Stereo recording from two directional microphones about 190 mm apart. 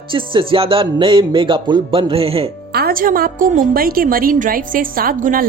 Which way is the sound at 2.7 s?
50° right (ahead or behind).